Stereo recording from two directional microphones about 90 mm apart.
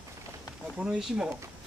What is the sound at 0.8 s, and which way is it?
Speech, 10° right (ahead or behind).